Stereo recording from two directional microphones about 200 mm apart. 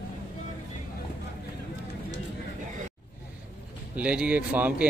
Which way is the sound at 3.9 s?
5° right (ahead or behind).